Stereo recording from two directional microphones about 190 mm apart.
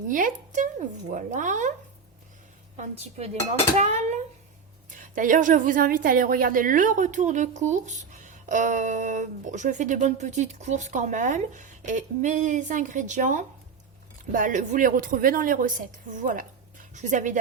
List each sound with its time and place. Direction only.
0.1 s a woman's voice: 45° right (ahead or behind)
2.7 s a woman's voice: 35° right (ahead or behind)